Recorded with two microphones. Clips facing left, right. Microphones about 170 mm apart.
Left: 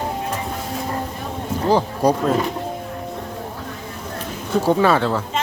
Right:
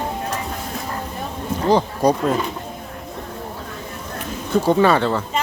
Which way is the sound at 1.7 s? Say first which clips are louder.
Right 1 dB; 5° left (ahead or behind).